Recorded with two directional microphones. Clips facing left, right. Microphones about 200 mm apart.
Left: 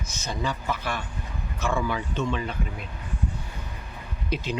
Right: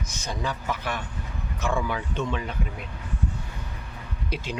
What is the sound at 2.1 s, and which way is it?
Speech, 10° right (ahead or behind).